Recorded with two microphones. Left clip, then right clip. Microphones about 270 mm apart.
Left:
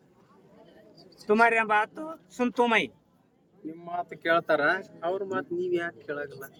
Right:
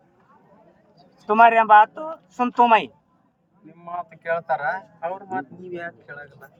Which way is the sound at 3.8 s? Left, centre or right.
Left.